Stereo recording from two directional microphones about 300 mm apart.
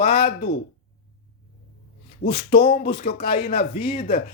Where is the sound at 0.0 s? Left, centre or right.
Left.